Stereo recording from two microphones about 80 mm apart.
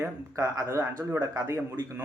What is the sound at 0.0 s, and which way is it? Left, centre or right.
Speech, right.